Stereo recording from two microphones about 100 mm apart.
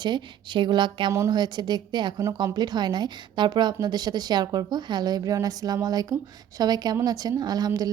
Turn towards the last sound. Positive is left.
turn(degrees=-40)  # may be behind; listen again after turning